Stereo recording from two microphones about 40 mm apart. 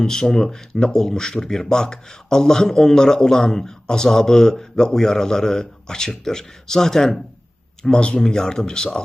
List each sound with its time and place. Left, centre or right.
0.0 s speech: centre